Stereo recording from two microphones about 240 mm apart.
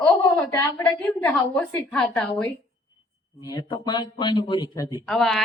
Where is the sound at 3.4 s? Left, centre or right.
Centre.